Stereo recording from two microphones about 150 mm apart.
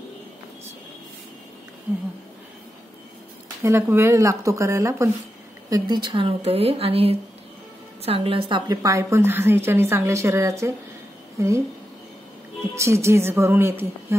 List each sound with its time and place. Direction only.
3.6 s a woman's voice: 20° right (ahead or behind)
5.7 s a woman's voice: 30° right (ahead or behind)
12.7 s a woman's voice: 20° right (ahead or behind)